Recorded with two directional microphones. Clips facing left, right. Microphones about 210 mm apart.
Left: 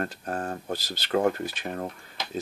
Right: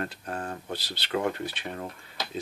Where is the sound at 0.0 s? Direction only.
45° left (ahead or behind).